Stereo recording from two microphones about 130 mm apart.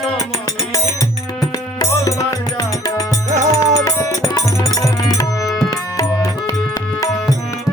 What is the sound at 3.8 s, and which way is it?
Music, 25° left (ahead or behind).